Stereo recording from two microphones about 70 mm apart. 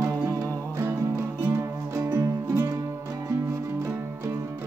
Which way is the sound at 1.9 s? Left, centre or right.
Right.